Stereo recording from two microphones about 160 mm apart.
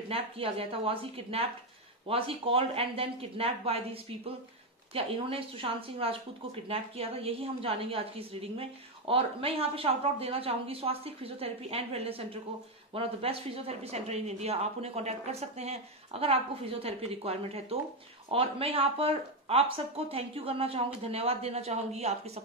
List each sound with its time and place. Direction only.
0.1 s speech: 35° right (ahead or behind)